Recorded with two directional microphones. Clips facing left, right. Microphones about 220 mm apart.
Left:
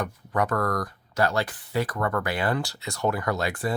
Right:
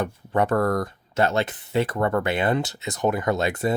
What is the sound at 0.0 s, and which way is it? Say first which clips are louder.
Speech: right 4 dB; 30° right (ahead or behind).